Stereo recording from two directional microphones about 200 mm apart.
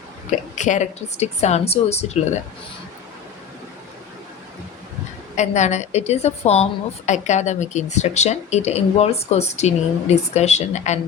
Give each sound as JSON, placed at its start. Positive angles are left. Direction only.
{"t": 0.3, "sound": "a woman's voice", "side_deg": 35}
{"t": 5.4, "sound": "a woman's voice", "side_deg": 35}